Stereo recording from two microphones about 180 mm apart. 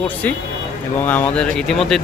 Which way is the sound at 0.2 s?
10° left (ahead or behind).